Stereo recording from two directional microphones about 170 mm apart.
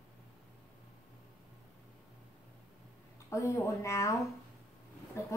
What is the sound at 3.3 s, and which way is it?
Speech, 15° left (ahead or behind).